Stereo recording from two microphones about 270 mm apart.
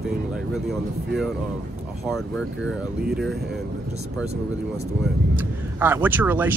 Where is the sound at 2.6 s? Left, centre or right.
Right.